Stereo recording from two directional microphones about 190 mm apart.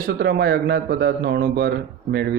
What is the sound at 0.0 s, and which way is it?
Speech, 55° right (ahead or behind).